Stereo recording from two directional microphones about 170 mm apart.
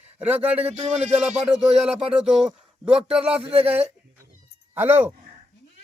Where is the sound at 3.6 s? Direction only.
10° right (ahead or behind).